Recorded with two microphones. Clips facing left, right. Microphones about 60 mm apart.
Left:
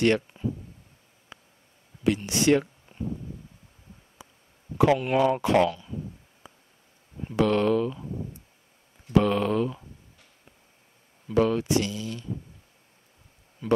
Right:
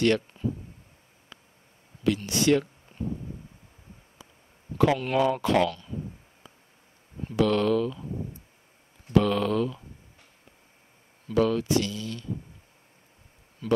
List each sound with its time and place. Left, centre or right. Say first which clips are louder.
0.3 s speech: even; centre
1.3 s a sound: left 2 dB; centre
2.0 s speech: left 1 dB; left
2.9 s a sound: even; centre
4.7 s speech: left 2 dB; centre
6.4 s a sound: left 3 dB; centre
7.3 s speech: left 1 dB; left
9.1 s speech: left 1 dB; left
11.3 s speech: left 1 dB; left
13.6 s speech: left 1 dB; centre